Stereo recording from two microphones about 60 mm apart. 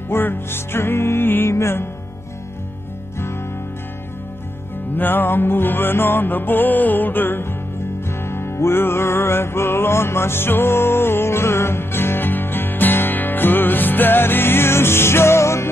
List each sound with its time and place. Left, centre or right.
0.1 s music: left
4.9 s music: left